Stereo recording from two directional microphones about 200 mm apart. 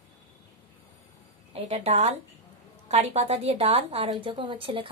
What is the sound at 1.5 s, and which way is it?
A woman's voice, 30° right (ahead or behind).